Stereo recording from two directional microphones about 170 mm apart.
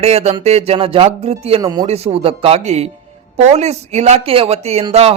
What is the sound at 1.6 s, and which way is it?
Speech, 25° right (ahead or behind).